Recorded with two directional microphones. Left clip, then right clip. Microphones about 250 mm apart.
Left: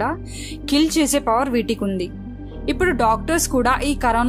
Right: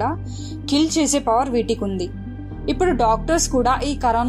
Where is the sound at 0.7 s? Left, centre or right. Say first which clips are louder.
Left 1 dB; left.